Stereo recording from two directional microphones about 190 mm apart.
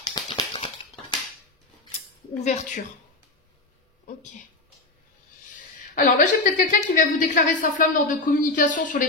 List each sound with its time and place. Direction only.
0.1 s a sound: 25° left (ahead or behind)
2.4 s a woman's voice: 40° left (ahead or behind)
5.5 s a woman's voice: 45° left (ahead or behind)